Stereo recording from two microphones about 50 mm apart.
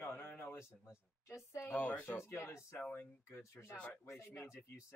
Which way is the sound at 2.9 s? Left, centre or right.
Left.